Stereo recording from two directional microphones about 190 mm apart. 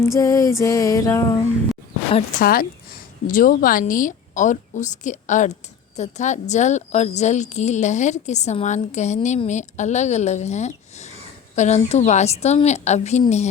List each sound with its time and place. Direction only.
0.0 s music: 15° left (ahead or behind)
2.4 s a woman's voice: 50° left (ahead or behind)